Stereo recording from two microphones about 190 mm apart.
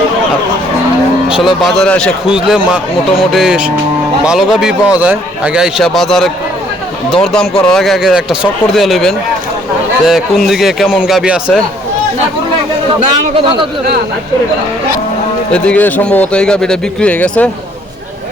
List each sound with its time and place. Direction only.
1.3 s a man's voice: centre (ahead or behind)
15.5 s speech: 5° left (ahead or behind)